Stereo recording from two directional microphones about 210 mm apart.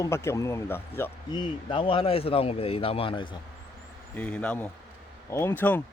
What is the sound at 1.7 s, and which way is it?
Speech, 25° left (ahead or behind).